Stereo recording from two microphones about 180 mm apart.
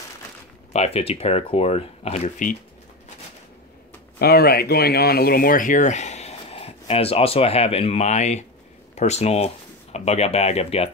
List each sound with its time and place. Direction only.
0.7 s speech: 35° left (ahead or behind)
4.2 s speech: 60° left (ahead or behind); by 10.9 s 35° left (ahead or behind)